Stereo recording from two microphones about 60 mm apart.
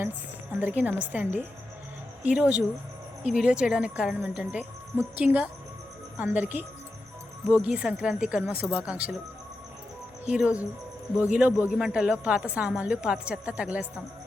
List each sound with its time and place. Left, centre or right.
0.6 s a woman's voice: right
10.2 s a woman's voice: right